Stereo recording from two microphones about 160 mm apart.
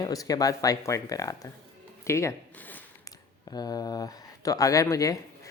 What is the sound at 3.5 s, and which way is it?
Speech, 25° left (ahead or behind).